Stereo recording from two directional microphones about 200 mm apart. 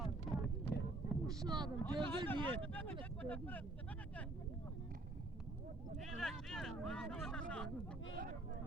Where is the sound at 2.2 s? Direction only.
10° left (ahead or behind).